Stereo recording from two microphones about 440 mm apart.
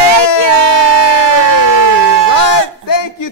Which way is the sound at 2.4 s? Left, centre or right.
Left.